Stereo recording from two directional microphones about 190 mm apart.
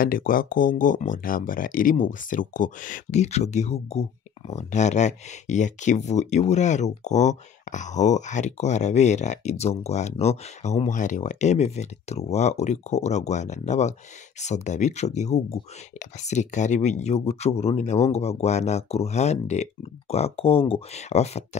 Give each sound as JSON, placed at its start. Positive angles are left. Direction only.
{"t": 0.0, "sound": "speech", "side_deg": 50}